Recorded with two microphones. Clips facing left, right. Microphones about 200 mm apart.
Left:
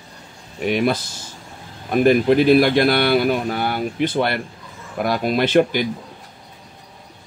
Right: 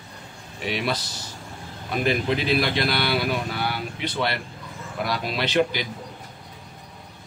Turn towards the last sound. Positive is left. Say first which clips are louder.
# left 7 dB
turn(degrees=50)  # may be behind; listen again after turning